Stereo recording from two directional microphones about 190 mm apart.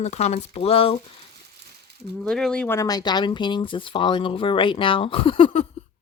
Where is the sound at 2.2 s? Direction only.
5° left (ahead or behind).